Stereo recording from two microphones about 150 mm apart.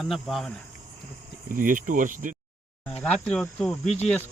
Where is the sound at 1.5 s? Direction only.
65° right (ahead or behind).